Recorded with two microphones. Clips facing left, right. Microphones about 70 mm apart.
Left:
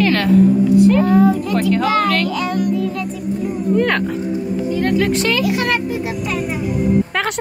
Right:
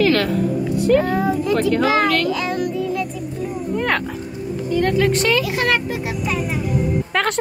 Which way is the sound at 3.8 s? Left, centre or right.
Centre.